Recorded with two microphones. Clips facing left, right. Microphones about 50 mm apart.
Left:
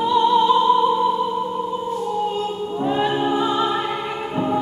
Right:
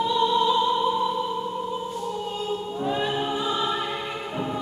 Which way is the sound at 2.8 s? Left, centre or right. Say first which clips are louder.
Left 7 dB; centre.